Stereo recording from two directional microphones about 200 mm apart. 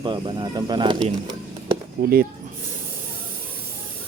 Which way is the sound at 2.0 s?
45° right (ahead or behind).